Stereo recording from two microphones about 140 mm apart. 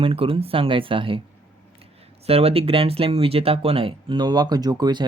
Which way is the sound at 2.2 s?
45° right (ahead or behind).